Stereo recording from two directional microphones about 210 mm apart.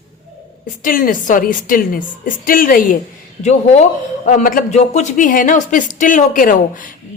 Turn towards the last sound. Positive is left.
turn(degrees=40)  # may be behind; listen again after turning